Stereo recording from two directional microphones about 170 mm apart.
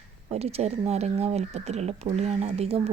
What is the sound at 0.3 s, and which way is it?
Speech, 35° right (ahead or behind).